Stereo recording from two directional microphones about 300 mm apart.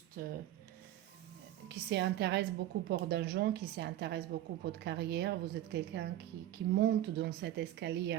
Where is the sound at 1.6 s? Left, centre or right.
Right.